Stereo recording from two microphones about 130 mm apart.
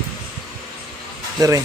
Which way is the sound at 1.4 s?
25° right (ahead or behind).